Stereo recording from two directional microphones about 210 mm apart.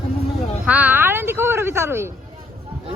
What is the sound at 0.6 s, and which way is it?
Speech, 10° right (ahead or behind).